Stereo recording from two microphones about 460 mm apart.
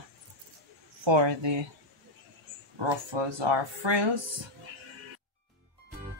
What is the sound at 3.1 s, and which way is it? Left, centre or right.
Speech, right.